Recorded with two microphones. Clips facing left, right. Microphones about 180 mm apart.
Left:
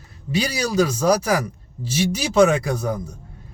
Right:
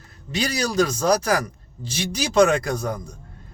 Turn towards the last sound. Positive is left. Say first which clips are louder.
# left 2 dB
turn(degrees=5)  # may be behind; listen again after turning